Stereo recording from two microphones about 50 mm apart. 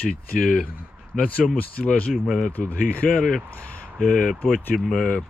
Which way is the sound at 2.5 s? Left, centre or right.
Left.